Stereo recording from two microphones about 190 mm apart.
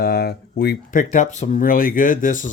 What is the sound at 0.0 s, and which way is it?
Speech, 55° left (ahead or behind).